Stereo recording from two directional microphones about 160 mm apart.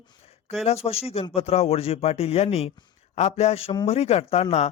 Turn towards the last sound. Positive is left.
turn(degrees=40)  # may be behind; listen again after turning